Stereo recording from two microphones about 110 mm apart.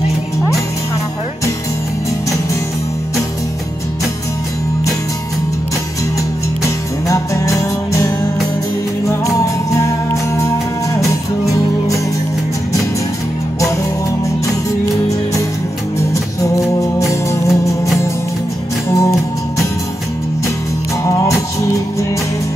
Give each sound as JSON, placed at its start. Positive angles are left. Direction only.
{"t": 6.6, "sound": "music", "side_deg": 30}
{"t": 16.0, "sound": "music", "side_deg": 30}
{"t": 18.9, "sound": "music", "side_deg": 25}
{"t": 21.0, "sound": "music", "side_deg": 30}